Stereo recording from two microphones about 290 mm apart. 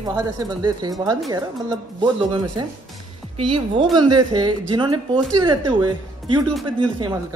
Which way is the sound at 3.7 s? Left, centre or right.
Centre.